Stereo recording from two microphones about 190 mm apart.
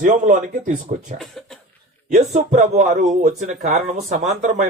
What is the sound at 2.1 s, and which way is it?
A man's voice, 40° right (ahead or behind).